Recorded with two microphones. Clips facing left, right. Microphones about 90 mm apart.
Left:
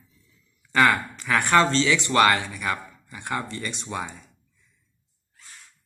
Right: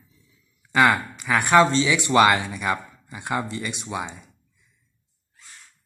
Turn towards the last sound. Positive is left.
turn(degrees=-5)  # may be behind; listen again after turning